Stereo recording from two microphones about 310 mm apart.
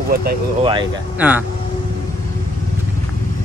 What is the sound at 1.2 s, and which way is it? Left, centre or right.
Speech, centre.